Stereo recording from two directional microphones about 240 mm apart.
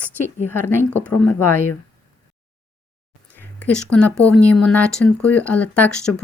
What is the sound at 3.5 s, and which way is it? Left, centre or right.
Speech, centre.